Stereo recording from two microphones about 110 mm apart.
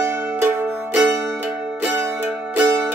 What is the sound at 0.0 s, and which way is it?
Music, 25° right (ahead or behind).